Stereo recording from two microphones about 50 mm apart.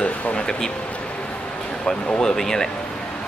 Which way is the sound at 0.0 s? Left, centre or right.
Centre.